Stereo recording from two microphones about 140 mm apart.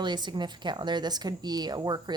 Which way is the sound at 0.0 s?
35° right (ahead or behind).